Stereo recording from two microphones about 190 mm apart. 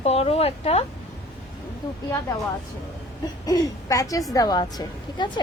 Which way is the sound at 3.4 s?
20° left (ahead or behind).